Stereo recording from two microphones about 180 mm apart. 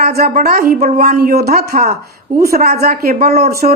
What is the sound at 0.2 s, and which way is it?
Speech, 55° right (ahead or behind).